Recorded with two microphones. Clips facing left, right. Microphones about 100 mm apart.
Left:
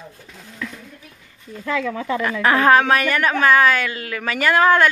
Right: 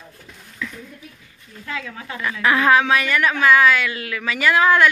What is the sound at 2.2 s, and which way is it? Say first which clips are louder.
Speech: left 1 dB; 40° left (ahead or behind).